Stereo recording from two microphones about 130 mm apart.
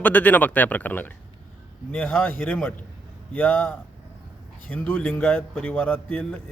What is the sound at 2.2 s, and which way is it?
Speech, 15° left (ahead or behind).